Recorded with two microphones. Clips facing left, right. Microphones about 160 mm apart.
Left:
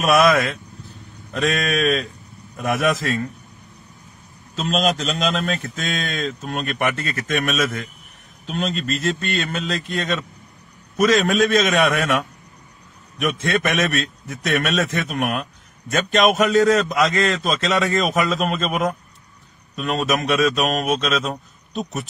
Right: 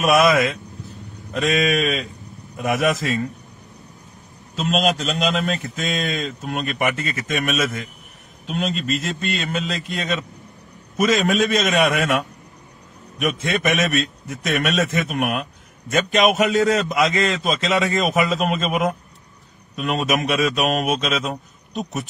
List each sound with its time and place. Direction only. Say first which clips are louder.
0.0 s speech: even; 5° right (ahead or behind)
4.6 s a man's voice: even; 5° right (ahead or behind)